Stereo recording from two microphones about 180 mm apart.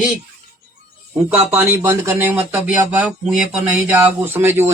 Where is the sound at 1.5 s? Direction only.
10° right (ahead or behind).